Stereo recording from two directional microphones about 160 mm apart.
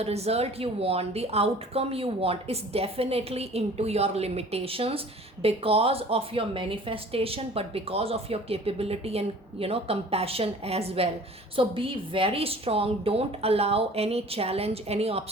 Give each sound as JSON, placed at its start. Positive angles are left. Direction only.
{"t": 0.0, "sound": "speech", "side_deg": -40}